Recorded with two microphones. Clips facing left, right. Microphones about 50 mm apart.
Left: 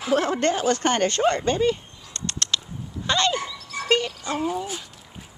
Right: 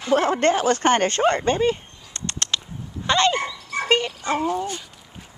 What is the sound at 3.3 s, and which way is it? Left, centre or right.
Dog, right.